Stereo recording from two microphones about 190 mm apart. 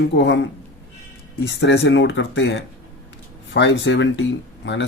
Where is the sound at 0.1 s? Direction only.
70° left (ahead or behind).